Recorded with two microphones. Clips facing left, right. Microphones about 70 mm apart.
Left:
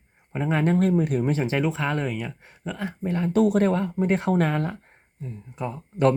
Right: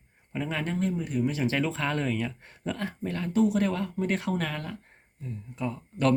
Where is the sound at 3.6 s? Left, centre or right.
Left.